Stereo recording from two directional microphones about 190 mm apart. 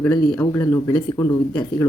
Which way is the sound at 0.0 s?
15° left (ahead or behind).